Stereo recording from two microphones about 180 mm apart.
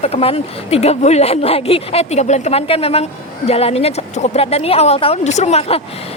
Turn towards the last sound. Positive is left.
turn(degrees=35)  # may be behind; listen again after turning